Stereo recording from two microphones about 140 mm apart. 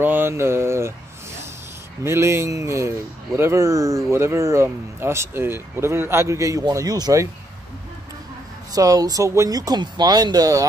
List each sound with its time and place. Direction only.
0.0 s speech: 15° right (ahead or behind)
2.0 s speech: 20° right (ahead or behind)
8.7 s speech: 25° right (ahead or behind)